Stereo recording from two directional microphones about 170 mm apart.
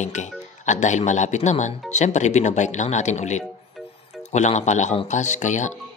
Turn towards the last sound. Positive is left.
turn(degrees=45)  # may be behind; listen again after turning